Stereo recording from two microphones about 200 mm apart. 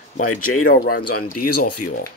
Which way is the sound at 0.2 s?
90° left.